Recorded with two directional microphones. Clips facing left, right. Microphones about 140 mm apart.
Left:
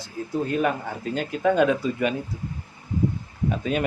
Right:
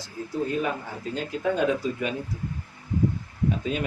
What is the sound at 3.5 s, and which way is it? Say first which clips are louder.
Speech: left 3 dB; 60° left (ahead or behind).